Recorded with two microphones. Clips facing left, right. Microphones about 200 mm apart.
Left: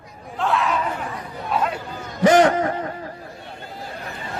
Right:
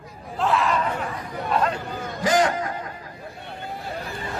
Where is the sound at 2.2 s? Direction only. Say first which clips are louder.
Left 7 dB; 25° left (ahead or behind).